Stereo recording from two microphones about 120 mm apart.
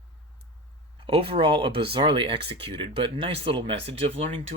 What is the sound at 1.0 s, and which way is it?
Speech, 45° right (ahead or behind).